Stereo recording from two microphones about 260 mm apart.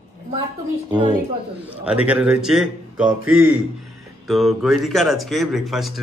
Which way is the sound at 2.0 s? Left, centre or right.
Centre.